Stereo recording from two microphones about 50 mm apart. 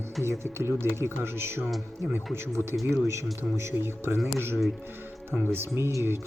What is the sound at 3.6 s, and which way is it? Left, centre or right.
Speech, right.